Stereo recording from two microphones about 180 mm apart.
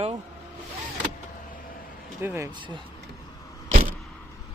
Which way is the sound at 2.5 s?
25° right (ahead or behind).